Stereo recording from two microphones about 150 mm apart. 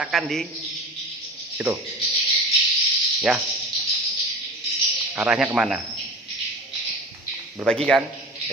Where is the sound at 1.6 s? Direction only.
10° right (ahead or behind).